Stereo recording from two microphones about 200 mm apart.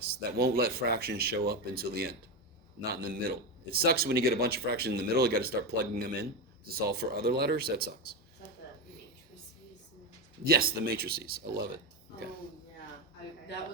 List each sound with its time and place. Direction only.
0.0 s a man's voice: 55° right (ahead or behind)
10.4 s a man's voice: 50° right (ahead or behind)